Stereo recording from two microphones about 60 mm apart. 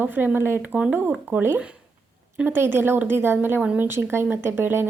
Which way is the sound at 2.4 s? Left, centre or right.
Right.